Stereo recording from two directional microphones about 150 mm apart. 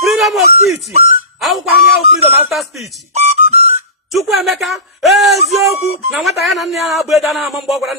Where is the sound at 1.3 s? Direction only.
Centre (ahead or behind).